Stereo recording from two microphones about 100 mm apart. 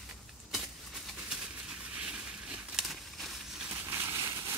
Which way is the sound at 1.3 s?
10° right (ahead or behind).